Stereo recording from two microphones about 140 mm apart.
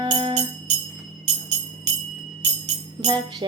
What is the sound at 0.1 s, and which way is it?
Music, 45° right (ahead or behind).